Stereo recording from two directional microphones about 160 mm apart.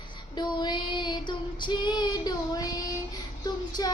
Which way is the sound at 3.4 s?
25° left (ahead or behind).